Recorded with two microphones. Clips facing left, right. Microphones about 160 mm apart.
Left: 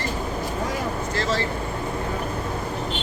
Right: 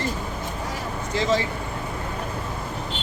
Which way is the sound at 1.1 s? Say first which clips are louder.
Right 4 dB; 15° right (ahead or behind).